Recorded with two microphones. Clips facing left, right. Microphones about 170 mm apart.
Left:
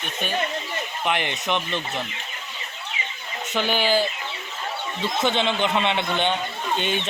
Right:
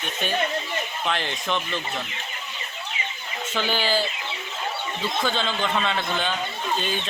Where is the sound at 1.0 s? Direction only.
15° left (ahead or behind).